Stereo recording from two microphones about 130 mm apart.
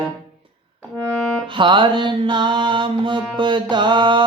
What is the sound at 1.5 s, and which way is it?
Music, 40° right (ahead or behind).